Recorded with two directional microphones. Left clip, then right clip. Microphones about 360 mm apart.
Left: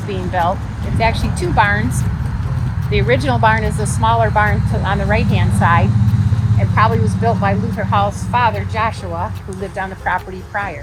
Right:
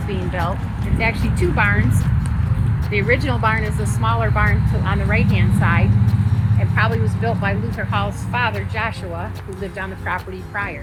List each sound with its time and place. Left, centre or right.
0.9 s speech: left
3.1 s speech: left